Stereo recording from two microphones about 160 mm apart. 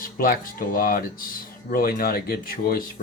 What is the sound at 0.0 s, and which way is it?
Speech, 65° left (ahead or behind).